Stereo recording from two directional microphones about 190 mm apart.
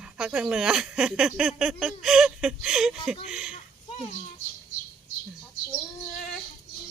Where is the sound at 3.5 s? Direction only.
30° left (ahead or behind).